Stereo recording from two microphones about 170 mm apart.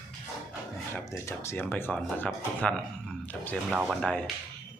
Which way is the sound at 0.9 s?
15° left (ahead or behind).